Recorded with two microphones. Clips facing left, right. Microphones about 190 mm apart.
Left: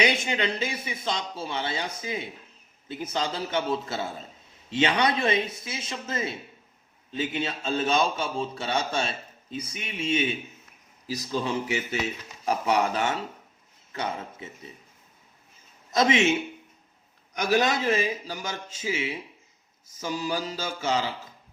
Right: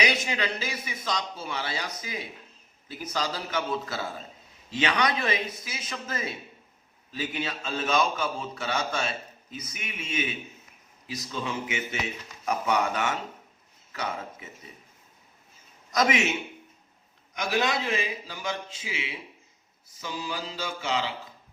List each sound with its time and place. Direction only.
0.0 s a man's voice: 25° left (ahead or behind)
15.9 s a man's voice: 25° left (ahead or behind)
17.3 s a man's voice: 40° left (ahead or behind)